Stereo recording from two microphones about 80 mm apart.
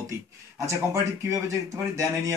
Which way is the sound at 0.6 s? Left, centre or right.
Right.